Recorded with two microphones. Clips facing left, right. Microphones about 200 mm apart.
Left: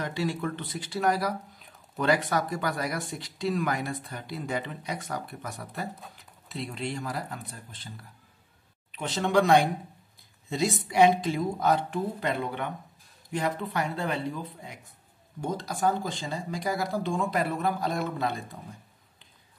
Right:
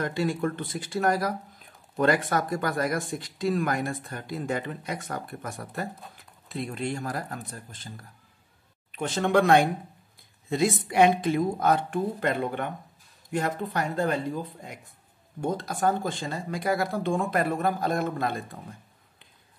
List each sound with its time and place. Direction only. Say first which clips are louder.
0.0 s speech: right 3 dB; 50° right (ahead or behind)
8.9 s speech: right 2 dB; 50° right (ahead or behind)